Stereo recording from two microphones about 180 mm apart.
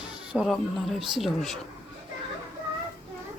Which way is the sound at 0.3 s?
Centre (ahead or behind).